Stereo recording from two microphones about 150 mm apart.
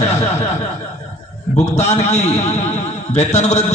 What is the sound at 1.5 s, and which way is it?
A man's voice, 45° left (ahead or behind).